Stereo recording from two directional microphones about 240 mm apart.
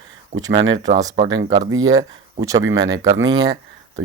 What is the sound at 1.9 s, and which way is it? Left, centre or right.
Speech, centre.